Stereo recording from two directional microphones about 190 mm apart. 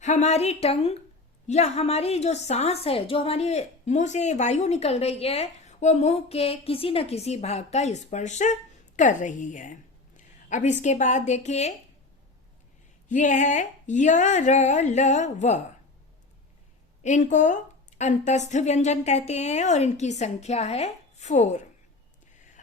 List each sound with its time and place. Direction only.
0.0 s a woman's voice: 40° left (ahead or behind)
13.1 s a woman's voice: 40° left (ahead or behind)
17.0 s a woman's voice: 40° left (ahead or behind)